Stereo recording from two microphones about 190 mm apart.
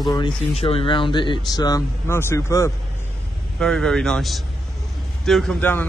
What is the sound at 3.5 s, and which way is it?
A man's voice, 5° left (ahead or behind).